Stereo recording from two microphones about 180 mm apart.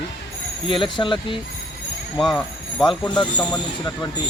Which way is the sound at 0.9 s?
25° left (ahead or behind).